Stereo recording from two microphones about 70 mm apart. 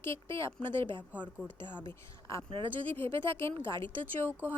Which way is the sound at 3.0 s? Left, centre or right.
Left.